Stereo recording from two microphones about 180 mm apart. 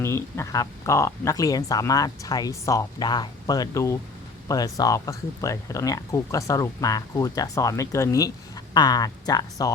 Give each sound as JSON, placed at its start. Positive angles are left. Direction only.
{"t": 0.0, "sound": "speech", "side_deg": 15}